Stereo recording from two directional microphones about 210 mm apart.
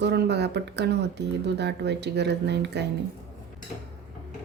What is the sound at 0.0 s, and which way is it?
Speech, 55° right (ahead or behind).